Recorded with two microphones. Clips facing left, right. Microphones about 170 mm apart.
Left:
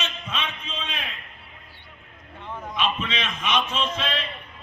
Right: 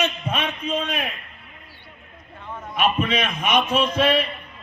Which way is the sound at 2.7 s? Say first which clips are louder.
Right 6 dB; 55° right (ahead or behind).